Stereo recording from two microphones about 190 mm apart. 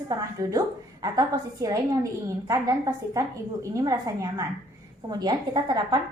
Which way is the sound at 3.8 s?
20° right (ahead or behind).